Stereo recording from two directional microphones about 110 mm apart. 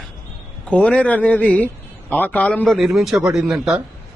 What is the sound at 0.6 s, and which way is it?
A man's voice, 10° left (ahead or behind).